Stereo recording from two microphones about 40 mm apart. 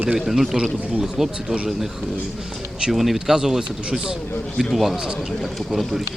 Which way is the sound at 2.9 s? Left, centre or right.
Centre.